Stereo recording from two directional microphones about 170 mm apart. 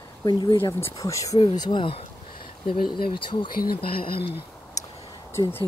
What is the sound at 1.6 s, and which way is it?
Speech, 25° left (ahead or behind).